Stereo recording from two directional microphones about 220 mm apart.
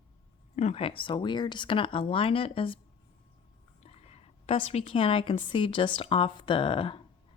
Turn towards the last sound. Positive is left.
turn(degrees=25)  # may be behind; listen again after turning